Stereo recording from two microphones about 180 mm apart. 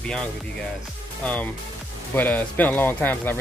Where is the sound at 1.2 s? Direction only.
5° left (ahead or behind).